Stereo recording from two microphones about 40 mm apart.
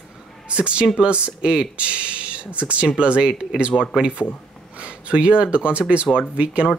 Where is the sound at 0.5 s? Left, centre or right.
Right.